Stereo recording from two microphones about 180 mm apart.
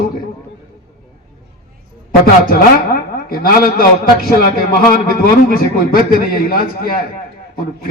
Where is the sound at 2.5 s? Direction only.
55° left (ahead or behind).